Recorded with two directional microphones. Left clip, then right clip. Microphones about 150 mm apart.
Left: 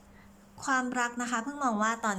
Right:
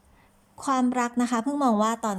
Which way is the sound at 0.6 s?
25° right (ahead or behind).